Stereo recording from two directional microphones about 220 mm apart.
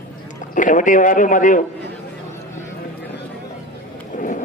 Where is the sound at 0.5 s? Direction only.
35° left (ahead or behind).